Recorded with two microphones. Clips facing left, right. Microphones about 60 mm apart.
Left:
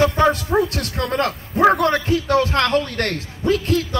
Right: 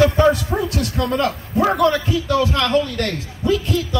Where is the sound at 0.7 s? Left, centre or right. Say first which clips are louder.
Right 2 dB; left.